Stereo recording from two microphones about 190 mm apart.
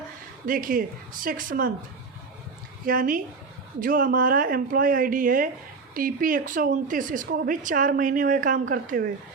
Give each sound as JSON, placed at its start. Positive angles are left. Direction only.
{"t": 0.4, "sound": "a woman's voice", "side_deg": -45}
{"t": 2.8, "sound": "a woman's voice", "side_deg": -50}